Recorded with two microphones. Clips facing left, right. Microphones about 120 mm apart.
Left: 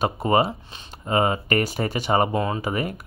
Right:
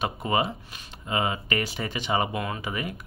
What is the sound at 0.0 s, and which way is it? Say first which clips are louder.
Speech: left 6 dB; 40° left (ahead or behind).